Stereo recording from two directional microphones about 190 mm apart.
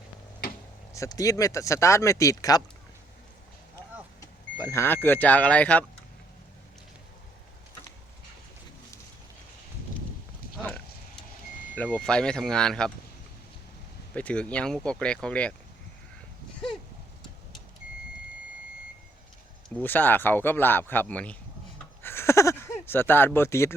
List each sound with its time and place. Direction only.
0.9 s speech: 20° left (ahead or behind)
4.2 s speech: 15° left (ahead or behind)
10.6 s a sound: 5° left (ahead or behind)
11.7 s speech: 10° left (ahead or behind)
14.1 s speech: 5° left (ahead or behind)
19.7 s speech: 10° left (ahead or behind)
22.0 s a sound: 15° left (ahead or behind)